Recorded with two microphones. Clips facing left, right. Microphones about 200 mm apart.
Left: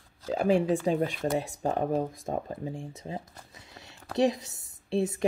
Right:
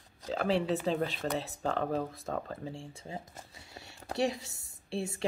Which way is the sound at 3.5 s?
20° left (ahead or behind).